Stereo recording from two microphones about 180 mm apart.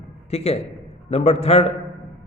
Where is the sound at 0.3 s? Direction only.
35° left (ahead or behind).